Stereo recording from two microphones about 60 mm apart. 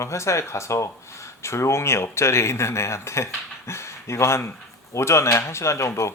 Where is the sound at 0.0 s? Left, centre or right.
Left.